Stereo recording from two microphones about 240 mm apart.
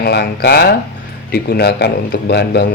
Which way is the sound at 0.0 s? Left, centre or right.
Left.